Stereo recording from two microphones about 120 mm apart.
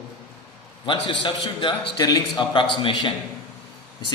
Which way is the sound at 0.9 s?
40° left (ahead or behind).